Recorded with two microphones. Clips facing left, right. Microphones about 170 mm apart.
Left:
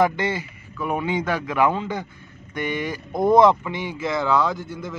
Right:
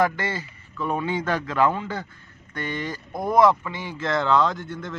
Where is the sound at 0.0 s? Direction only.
20° left (ahead or behind).